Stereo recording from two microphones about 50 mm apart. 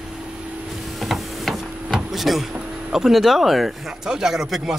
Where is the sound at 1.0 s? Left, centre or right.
Centre.